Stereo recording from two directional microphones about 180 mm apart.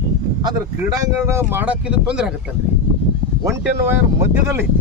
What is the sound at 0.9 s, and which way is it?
Speech, 15° right (ahead or behind).